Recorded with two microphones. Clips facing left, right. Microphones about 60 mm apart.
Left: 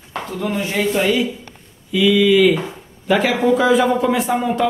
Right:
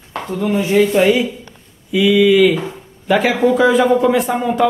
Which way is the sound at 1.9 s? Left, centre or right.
Centre.